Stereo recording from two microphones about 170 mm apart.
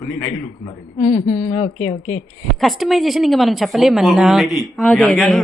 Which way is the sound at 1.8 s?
10° left (ahead or behind).